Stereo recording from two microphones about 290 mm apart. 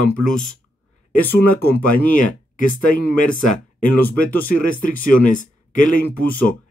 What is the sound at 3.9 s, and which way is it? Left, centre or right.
Speech, centre.